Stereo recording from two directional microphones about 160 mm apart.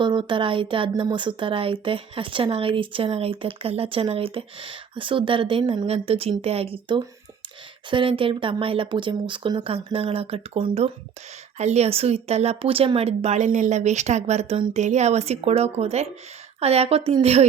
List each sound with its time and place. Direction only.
0.0 s speech: 30° right (ahead or behind)